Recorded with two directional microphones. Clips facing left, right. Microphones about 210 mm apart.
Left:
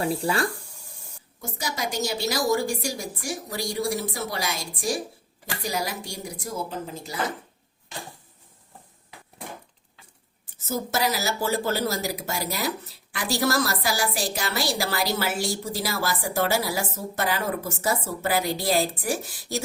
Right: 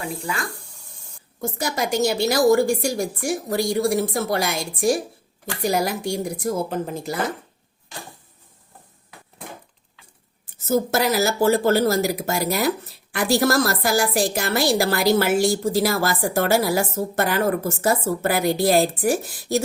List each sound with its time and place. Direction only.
0.0 s speech: 35° left (ahead or behind)
1.4 s a woman's voice: 55° right (ahead or behind)
10.7 s a woman's voice: 55° right (ahead or behind)